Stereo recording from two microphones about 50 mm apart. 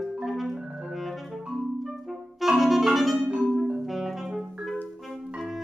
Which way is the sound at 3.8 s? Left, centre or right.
Centre.